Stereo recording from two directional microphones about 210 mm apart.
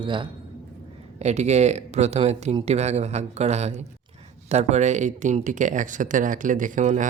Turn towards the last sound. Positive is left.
turn(degrees=-35)  # may be behind; listen again after turning